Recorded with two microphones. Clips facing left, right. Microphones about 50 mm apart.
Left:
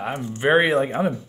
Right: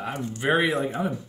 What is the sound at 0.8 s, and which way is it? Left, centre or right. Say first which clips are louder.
Speech: left 5 dB; left.